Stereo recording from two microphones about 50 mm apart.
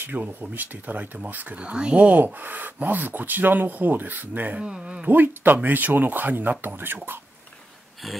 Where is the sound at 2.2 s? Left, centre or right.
Right.